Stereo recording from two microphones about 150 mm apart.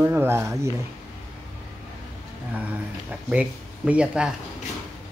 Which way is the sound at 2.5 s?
10° right (ahead or behind).